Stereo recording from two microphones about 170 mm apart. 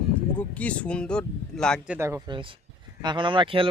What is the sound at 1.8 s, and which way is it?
Speech, 10° right (ahead or behind).